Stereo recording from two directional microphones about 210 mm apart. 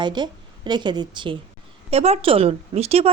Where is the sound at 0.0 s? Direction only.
20° right (ahead or behind).